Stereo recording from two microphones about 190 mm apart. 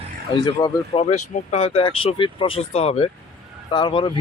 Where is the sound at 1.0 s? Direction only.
35° left (ahead or behind).